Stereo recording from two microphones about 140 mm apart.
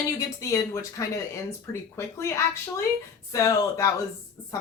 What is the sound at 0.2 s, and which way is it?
Speech, 25° left (ahead or behind).